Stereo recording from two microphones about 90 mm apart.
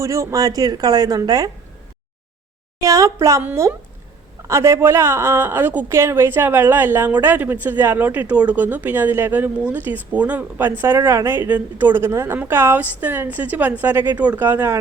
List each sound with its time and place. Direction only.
0.0 s speech: 35° right (ahead or behind)
2.8 s a woman's voice: 40° right (ahead or behind)